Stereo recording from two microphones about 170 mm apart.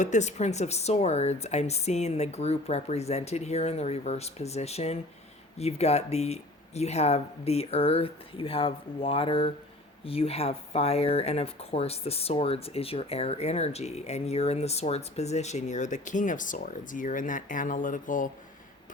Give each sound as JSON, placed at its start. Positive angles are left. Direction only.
{"t": 0.0, "sound": "speech", "side_deg": 45}